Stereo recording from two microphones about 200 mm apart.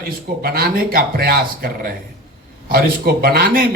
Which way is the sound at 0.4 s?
50° right (ahead or behind).